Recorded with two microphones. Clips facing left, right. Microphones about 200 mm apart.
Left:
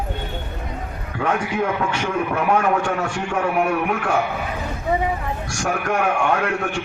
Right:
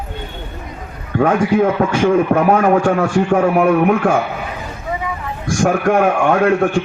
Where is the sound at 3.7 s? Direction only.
45° right (ahead or behind).